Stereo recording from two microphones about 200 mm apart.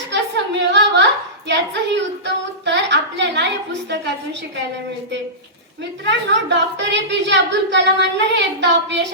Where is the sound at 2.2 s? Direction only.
60° right (ahead or behind).